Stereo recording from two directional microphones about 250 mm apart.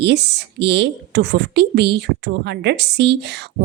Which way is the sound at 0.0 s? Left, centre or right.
Right.